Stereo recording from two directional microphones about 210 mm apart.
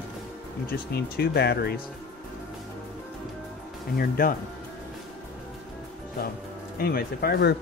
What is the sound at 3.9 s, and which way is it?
Speech, 45° left (ahead or behind).